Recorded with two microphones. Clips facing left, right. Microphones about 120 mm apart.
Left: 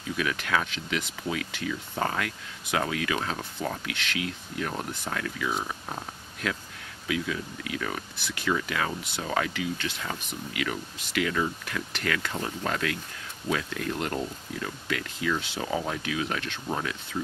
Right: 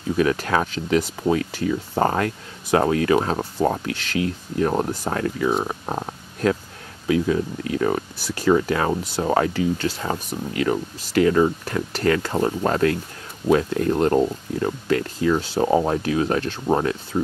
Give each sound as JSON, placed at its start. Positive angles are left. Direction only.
{"t": 0.1, "sound": "speech", "side_deg": -35}